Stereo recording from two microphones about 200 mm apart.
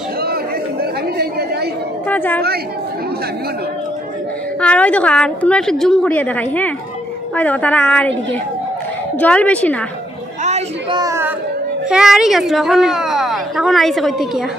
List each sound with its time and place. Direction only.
0.2 s chatter: 50° right (ahead or behind)
2.0 s a woman's voice: 10° left (ahead or behind)
4.6 s a woman's voice: 5° left (ahead or behind)
9.2 s a woman's voice: 5° left (ahead or behind)
10.4 s a sound: 35° right (ahead or behind)
11.0 s child singing: 15° right (ahead or behind)
11.9 s a woman's voice: centre (ahead or behind)